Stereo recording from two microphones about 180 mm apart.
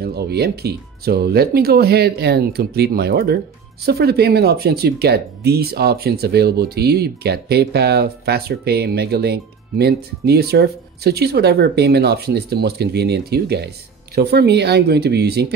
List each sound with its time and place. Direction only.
0.0 s speech: 60° right (ahead or behind)